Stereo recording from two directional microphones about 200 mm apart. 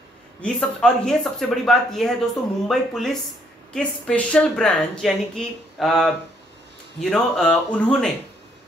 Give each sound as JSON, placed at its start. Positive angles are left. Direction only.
{"t": 0.4, "sound": "a woman's voice", "side_deg": 5}